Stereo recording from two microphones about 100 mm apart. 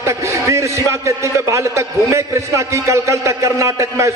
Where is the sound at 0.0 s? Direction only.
30° right (ahead or behind).